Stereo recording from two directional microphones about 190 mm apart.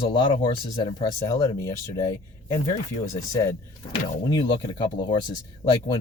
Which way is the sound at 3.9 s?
25° left (ahead or behind).